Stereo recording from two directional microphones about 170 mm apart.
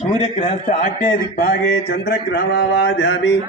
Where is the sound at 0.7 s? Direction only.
55° left (ahead or behind); by 3.3 s 90° left.